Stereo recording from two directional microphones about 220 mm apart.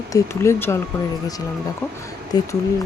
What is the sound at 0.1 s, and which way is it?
Speech, 10° left (ahead or behind).